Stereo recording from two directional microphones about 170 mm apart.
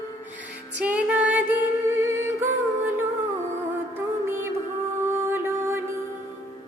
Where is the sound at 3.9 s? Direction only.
15° right (ahead or behind).